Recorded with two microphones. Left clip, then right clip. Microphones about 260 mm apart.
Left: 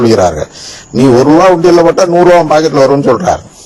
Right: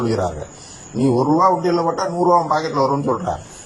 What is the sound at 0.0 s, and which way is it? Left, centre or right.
A man's voice, left.